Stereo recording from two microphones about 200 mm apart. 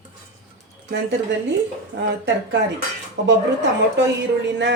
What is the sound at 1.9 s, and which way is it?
Speech, 55° right (ahead or behind).